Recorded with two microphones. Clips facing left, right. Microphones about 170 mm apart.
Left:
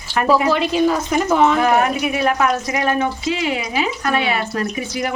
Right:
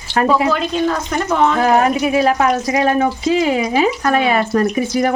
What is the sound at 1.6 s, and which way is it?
Speech, 35° right (ahead or behind).